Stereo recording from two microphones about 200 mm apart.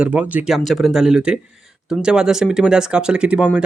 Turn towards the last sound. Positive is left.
turn(degrees=-5)  # may be behind; listen again after turning